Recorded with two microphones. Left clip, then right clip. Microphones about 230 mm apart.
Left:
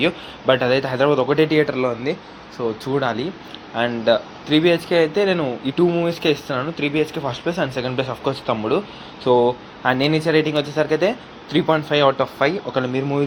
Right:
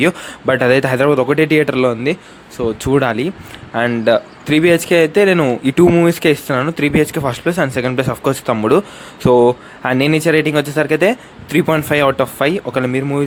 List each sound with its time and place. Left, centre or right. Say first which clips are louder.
0.5 s speech: right 6 dB; right
6.7 s speech: right 5 dB; right
7.0 s speech: right 6 dB; right